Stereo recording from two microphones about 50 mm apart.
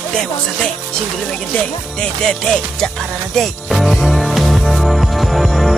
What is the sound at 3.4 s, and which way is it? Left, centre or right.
Music, centre.